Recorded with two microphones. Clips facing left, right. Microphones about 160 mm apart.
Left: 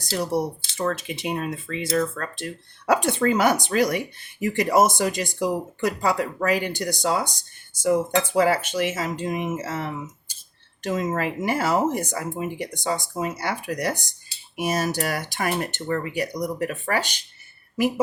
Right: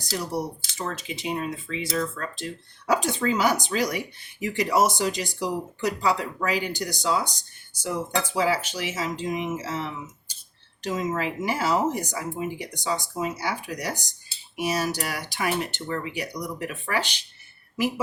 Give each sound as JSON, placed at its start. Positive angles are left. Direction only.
{"t": 0.8, "sound": "speech", "side_deg": 60}